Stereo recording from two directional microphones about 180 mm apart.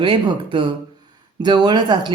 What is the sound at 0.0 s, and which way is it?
Speech, 25° right (ahead or behind).